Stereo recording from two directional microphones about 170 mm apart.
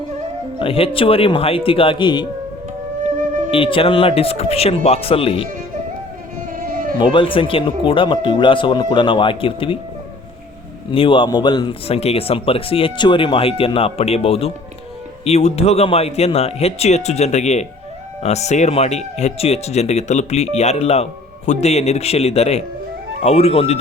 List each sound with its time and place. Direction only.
0.6 s speech: 35° left (ahead or behind)
3.5 s speech: 30° left (ahead or behind)
6.6 s a sound: 55° right (ahead or behind)
7.0 s speech: 30° left (ahead or behind)
10.9 s speech: 30° left (ahead or behind)